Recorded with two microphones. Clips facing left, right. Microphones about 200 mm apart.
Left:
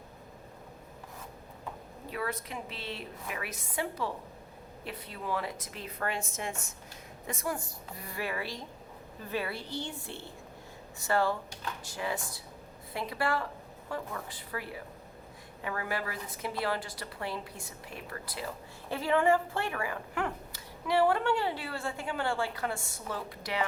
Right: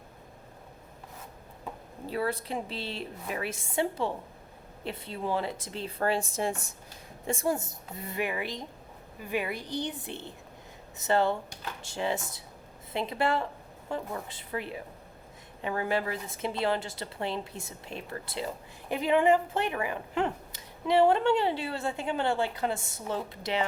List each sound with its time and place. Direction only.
2.0 s a woman's voice: 30° right (ahead or behind)